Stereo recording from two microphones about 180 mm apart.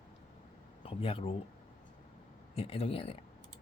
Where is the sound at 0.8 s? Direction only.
30° left (ahead or behind).